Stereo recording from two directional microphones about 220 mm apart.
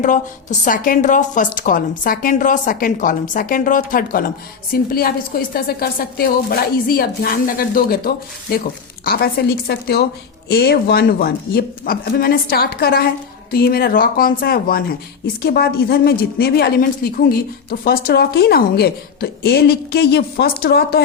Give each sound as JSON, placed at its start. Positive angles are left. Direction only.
{"t": 0.0, "sound": "a woman's voice", "side_deg": 35}